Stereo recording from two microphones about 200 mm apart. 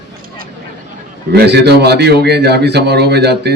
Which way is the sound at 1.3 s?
55° right (ahead or behind).